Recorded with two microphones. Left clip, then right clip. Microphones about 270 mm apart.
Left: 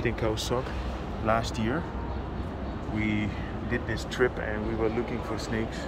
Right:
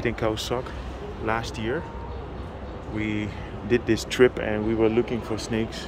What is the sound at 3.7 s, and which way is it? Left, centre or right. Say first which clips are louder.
Speech: right 9 dB; right.